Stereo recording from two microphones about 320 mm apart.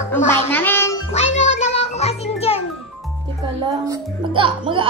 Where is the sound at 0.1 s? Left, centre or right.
Centre.